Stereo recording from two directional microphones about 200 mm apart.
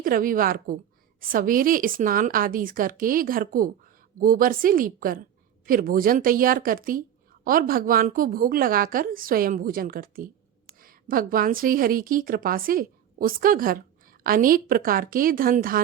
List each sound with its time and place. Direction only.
0.0 s a woman's voice: 45° right (ahead or behind)